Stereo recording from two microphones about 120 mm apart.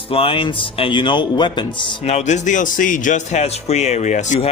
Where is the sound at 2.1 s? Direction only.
70° left (ahead or behind).